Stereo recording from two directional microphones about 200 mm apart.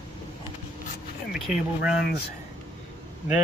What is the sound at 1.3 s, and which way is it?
Speech, 5° right (ahead or behind).